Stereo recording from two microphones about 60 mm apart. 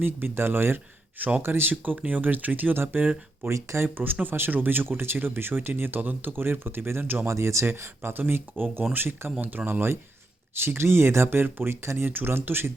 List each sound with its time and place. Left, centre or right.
0.0 s speech: right
2.0 s speech: right
3.4 s speech: right
3.8 s speech: right
7.3 s speech: right